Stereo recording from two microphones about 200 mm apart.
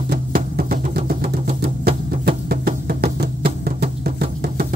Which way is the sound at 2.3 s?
50° right (ahead or behind).